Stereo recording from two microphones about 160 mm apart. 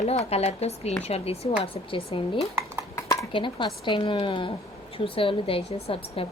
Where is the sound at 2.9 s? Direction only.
20° left (ahead or behind).